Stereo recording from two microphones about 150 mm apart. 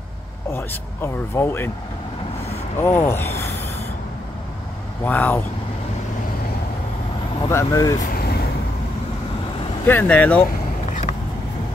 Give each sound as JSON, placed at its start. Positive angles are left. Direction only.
{"t": 0.5, "sound": "speech", "side_deg": 15}
{"t": 2.8, "sound": "speech", "side_deg": 15}
{"t": 5.0, "sound": "speech", "side_deg": 10}
{"t": 7.4, "sound": "speech", "side_deg": 20}
{"t": 8.0, "sound": "vehicle", "side_deg": 85}
{"t": 9.8, "sound": "speech", "side_deg": 10}